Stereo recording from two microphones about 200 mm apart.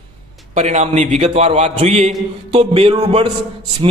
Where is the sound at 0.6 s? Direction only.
35° right (ahead or behind).